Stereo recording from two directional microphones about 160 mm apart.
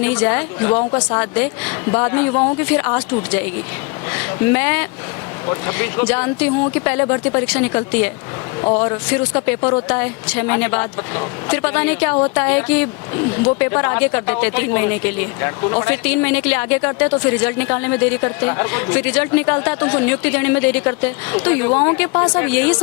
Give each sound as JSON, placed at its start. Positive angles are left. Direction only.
{"t": 0.0, "sound": "speech", "side_deg": 10}
{"t": 0.9, "sound": "speech", "side_deg": 25}
{"t": 1.2, "sound": "speech", "side_deg": 10}